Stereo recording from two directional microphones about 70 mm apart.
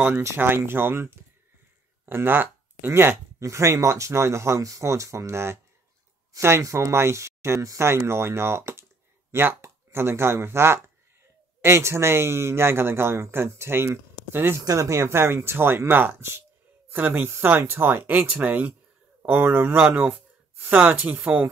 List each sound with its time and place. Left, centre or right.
0.2 s speech: right
14.6 s speech: right